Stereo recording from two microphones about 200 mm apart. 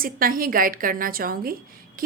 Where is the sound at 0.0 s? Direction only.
45° right (ahead or behind).